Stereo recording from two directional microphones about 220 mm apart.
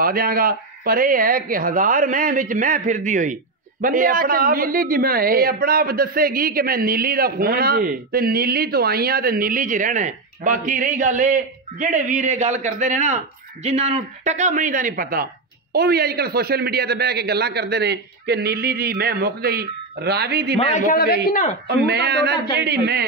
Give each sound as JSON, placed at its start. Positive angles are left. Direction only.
{"t": 0.0, "sound": "a woman's voice", "side_deg": -40}
{"t": 20.5, "sound": "a man's voice", "side_deg": 35}
{"t": 21.6, "sound": "a man's voice", "side_deg": -50}